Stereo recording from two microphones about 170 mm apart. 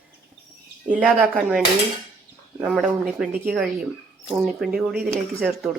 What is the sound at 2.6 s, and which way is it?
A woman's voice, 5° right (ahead or behind).